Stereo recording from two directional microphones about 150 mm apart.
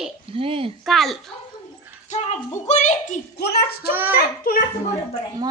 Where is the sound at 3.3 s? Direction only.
90° left.